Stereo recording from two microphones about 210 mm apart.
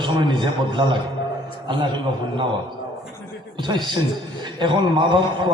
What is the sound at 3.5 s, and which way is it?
A man's voice, 20° right (ahead or behind).